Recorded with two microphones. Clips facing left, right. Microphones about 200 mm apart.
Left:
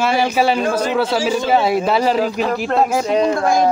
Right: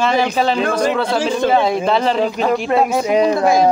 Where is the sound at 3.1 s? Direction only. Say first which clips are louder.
Right 2 dB; 10° right (ahead or behind).